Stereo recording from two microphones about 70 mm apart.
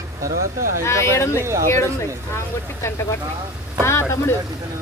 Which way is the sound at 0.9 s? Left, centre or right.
Left.